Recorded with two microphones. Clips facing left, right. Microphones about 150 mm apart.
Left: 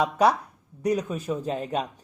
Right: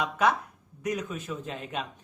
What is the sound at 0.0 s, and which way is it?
Speech, 35° left (ahead or behind).